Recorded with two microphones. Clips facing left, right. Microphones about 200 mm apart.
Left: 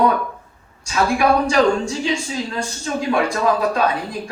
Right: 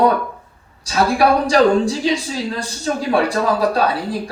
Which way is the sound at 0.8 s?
35° right (ahead or behind).